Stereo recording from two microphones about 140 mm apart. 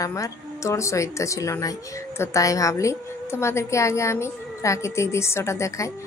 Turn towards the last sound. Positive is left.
turn(degrees=20)  # may be behind; listen again after turning